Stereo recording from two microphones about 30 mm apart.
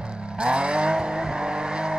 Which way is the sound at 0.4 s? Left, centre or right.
Right.